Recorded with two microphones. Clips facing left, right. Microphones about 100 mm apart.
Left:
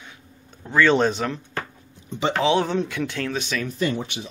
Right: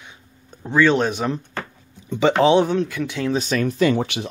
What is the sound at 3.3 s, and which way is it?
Speech, 40° right (ahead or behind).